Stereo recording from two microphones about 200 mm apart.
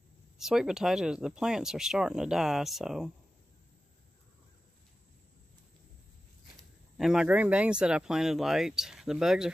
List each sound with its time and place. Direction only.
0.4 s speech: centre (ahead or behind)
7.0 s speech: 5° right (ahead or behind)